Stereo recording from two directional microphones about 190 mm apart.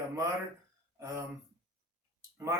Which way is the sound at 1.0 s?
15° right (ahead or behind).